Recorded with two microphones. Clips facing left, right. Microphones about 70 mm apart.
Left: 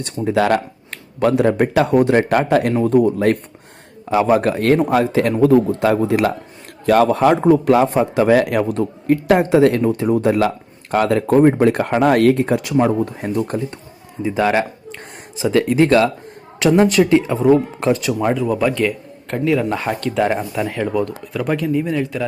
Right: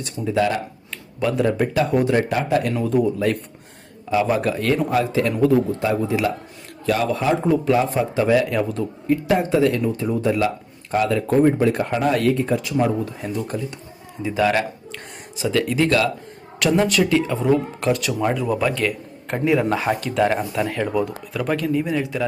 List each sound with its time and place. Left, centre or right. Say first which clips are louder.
0.0 s a man's voice: left 3 dB; left
13.2 s speech: left 5 dB; left
14.3 s speech: left 2 dB; left
18.3 s speech: left 4 dB; centre
19.3 s speech: left 1 dB; centre